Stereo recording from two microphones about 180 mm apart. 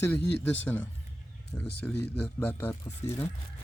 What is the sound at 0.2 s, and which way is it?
Speech, 70° left (ahead or behind).